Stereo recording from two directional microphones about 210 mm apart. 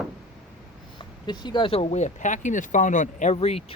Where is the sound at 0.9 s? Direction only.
20° left (ahead or behind).